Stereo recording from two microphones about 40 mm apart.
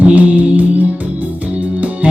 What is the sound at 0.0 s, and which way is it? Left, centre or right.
Music, right.